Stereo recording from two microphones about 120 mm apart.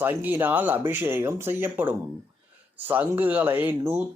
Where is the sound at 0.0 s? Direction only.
15° right (ahead or behind).